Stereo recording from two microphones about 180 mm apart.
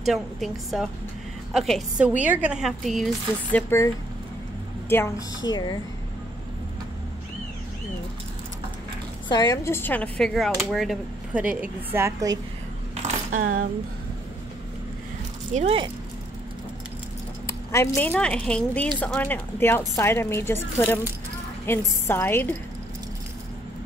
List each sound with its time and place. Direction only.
0.0 s a woman's voice: centre (ahead or behind)
3.5 s a woman's voice: 15° left (ahead or behind)
9.3 s a woman's voice: 20° left (ahead or behind); by 12.4 s 15° right (ahead or behind)
12.9 s keys jangling: 40° right (ahead or behind)
15.5 s speech: 35° right (ahead or behind)
17.5 s a woman's voice: 15° left (ahead or behind)